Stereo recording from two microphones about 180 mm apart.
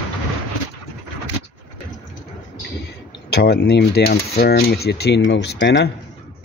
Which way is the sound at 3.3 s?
65° left (ahead or behind).